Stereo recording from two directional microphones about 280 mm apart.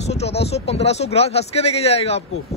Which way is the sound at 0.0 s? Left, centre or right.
Left.